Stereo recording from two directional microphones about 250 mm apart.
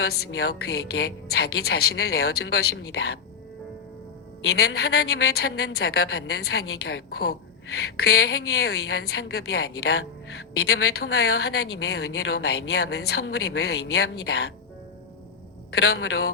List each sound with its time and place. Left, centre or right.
0.0 s speech: left
4.4 s speech: left
15.7 s speech: left